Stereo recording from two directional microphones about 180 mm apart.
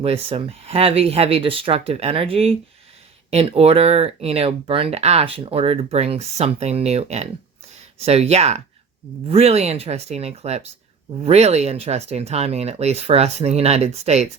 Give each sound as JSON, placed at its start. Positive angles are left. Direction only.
{"t": 0.0, "sound": "speech", "side_deg": -30}